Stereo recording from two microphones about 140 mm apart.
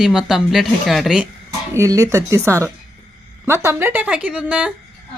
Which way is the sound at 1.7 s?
20° right (ahead or behind).